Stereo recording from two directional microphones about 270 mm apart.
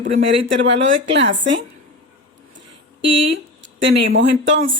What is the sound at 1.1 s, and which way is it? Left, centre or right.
Speech, right.